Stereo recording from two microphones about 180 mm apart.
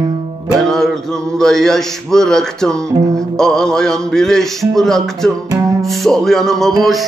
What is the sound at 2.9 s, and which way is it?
Music, 15° right (ahead or behind).